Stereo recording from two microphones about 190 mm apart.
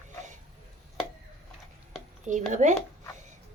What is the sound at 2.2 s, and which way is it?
Speech, 40° right (ahead or behind).